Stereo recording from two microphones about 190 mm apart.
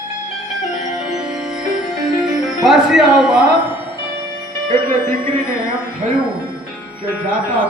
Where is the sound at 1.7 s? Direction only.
Centre (ahead or behind).